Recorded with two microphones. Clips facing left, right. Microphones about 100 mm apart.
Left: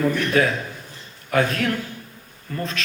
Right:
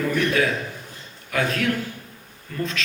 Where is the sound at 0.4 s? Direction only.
40° left (ahead or behind).